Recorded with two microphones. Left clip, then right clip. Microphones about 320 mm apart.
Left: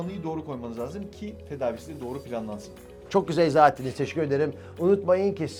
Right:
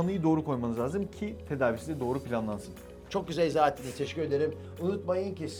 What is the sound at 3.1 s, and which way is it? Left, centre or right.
A man's voice, left.